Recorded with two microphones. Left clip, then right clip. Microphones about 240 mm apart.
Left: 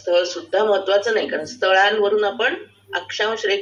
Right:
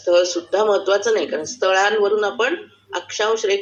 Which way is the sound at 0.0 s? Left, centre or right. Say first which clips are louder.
Right 3 dB; right.